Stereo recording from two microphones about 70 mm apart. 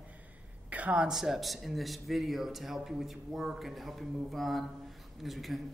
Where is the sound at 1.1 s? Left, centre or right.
Centre.